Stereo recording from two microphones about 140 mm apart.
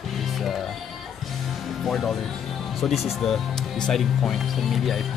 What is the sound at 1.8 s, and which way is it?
Speech, centre (ahead or behind).